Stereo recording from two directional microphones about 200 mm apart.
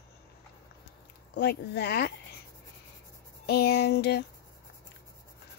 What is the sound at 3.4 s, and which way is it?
Speech, 55° left (ahead or behind).